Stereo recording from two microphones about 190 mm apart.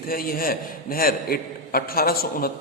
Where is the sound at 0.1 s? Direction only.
50° left (ahead or behind).